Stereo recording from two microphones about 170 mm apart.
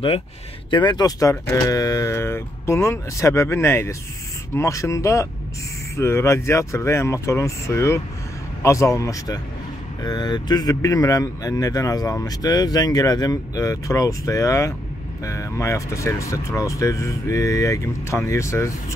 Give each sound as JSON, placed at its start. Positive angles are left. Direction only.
{"t": 0.7, "sound": "speech", "side_deg": 25}